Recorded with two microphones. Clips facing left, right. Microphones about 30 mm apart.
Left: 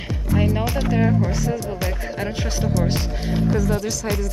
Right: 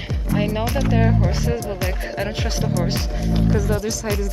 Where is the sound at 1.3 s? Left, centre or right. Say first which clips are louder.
Even; right.